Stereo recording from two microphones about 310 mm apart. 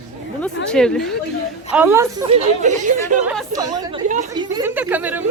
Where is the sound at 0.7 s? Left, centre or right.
Centre.